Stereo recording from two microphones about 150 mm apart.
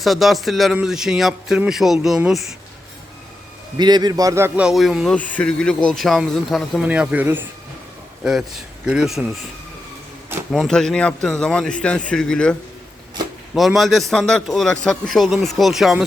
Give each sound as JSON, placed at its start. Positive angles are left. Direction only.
{"t": 0.0, "sound": "a man's voice", "side_deg": 0}
{"t": 3.8, "sound": "a man's voice", "side_deg": -30}
{"t": 10.5, "sound": "a man's voice", "side_deg": 5}